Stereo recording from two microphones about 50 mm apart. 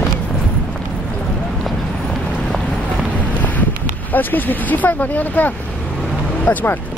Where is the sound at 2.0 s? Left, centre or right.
Centre.